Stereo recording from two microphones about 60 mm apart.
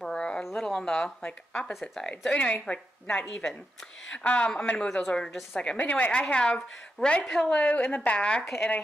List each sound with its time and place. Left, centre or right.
0.0 s a sound: centre
0.4 s speech: centre
5.6 s a woman's voice: left
7.2 s a woman's voice: centre
7.5 s a woman's voice: left